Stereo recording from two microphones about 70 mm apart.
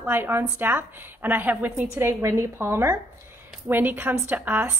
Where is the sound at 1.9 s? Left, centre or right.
Right.